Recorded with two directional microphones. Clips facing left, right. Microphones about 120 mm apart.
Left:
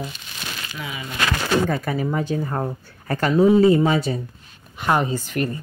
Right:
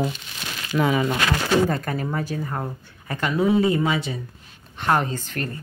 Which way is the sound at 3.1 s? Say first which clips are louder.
Left 5 dB; 40° left (ahead or behind).